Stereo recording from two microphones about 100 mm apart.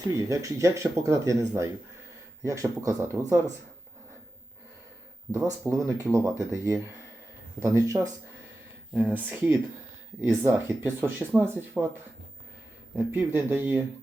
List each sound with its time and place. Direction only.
0.3 s speech: 35° right (ahead or behind)
5.5 s speech: 30° right (ahead or behind)
9.0 s speech: 15° right (ahead or behind)
13.0 s speech: 20° right (ahead or behind)